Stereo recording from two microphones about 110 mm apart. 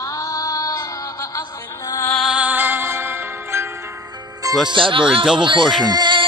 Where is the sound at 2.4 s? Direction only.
15° right (ahead or behind).